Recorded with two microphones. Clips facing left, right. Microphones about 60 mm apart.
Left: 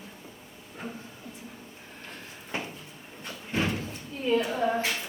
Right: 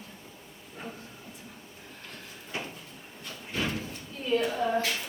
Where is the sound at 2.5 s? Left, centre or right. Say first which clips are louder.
Left 2 dB; left.